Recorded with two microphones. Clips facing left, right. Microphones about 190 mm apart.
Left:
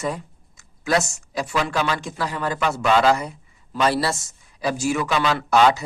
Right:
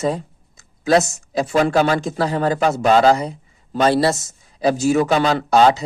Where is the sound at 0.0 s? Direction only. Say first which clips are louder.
Right 6 dB; 30° right (ahead or behind).